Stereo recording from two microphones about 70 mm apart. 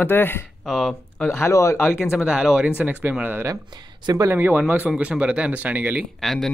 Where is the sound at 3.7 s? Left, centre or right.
Right.